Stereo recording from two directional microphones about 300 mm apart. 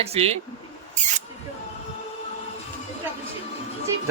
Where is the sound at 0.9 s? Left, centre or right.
Right.